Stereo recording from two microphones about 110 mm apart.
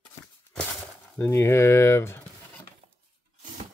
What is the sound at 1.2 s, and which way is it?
Speech, 25° left (ahead or behind).